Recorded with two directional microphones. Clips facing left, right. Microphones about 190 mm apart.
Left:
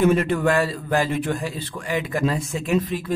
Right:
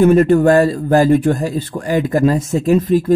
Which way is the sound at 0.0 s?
40° right (ahead or behind).